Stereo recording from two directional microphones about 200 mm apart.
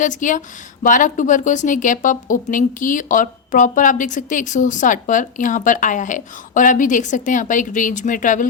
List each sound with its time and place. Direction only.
0.0 s a woman's voice: 40° left (ahead or behind)